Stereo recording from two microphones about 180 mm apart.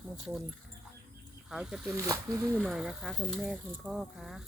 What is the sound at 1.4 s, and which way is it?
Speech, 5° right (ahead or behind).